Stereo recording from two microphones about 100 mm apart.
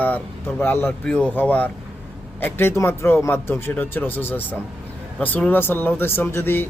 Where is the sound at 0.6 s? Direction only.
20° left (ahead or behind).